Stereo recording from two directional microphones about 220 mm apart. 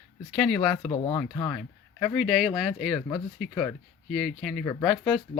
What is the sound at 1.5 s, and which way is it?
Speech, 5° left (ahead or behind).